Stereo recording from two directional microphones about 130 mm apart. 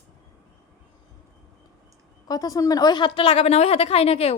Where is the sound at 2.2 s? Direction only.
30° left (ahead or behind); by 4.4 s 50° left (ahead or behind).